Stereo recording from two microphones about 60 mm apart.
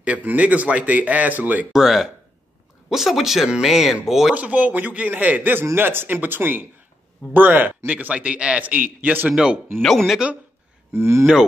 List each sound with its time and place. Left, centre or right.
0.0 s a man's voice: right
1.7 s speech: centre
4.3 s a man's voice: right
9.8 s speech: centre
10.9 s speech: right